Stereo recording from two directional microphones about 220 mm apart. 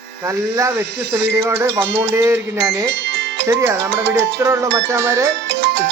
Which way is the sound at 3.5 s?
15° right (ahead or behind).